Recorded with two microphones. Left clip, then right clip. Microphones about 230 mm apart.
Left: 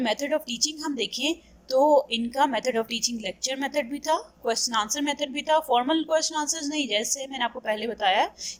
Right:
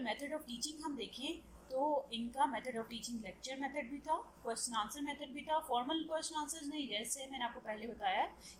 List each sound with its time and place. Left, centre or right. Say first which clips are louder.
0.0 s a woman's voice: left 16 dB; left